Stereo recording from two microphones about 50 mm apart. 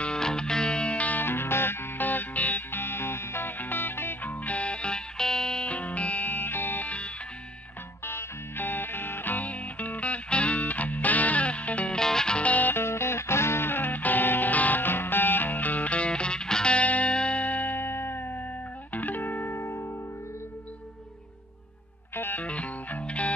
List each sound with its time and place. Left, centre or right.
0.0 s music: centre
1.2 s music: left
2.7 s music: left
4.2 s music: left
8.0 s music: left
11.9 s music: centre
12.4 s music: left
12.7 s music: left
22.1 s music: left
22.4 s music: left